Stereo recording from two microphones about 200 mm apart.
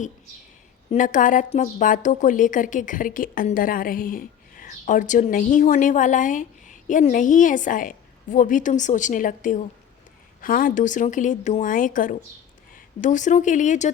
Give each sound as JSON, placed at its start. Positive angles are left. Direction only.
{"t": 0.9, "sound": "a woman's voice", "side_deg": 40}